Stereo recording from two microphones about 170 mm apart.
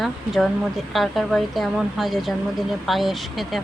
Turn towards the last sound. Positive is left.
turn(degrees=0)  # may be behind; listen again after turning